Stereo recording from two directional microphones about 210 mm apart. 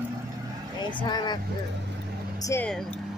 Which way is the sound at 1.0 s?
20° left (ahead or behind).